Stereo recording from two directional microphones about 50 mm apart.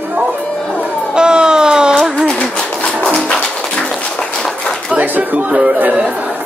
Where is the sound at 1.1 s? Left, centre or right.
Centre.